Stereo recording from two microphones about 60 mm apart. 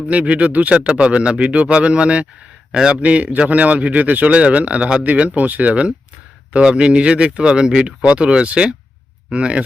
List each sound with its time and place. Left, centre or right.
0.1 s a man's voice: right